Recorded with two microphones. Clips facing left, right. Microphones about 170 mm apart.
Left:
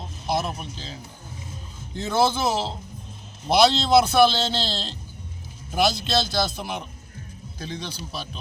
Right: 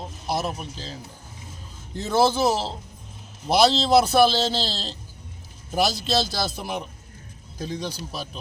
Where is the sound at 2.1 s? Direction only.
35° right (ahead or behind).